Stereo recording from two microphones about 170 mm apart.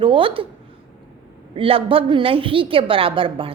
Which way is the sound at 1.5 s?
30° right (ahead or behind).